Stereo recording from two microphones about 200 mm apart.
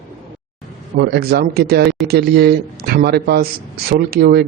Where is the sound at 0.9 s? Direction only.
50° right (ahead or behind).